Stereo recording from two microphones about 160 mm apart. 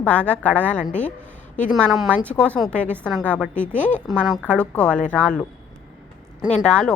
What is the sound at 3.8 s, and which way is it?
Speech, 50° left (ahead or behind).